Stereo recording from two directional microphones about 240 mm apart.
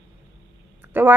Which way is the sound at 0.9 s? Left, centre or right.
Centre.